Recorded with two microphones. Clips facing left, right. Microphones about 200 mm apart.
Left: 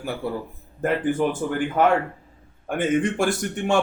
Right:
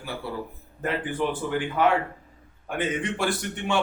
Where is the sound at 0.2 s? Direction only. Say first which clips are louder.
Left 4 dB; 50° left (ahead or behind).